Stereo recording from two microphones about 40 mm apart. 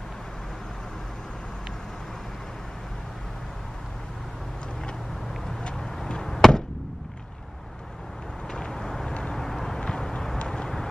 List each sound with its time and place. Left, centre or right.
6.2 s slam: centre
8.5 s vehicle: centre
9.4 s vehicle: centre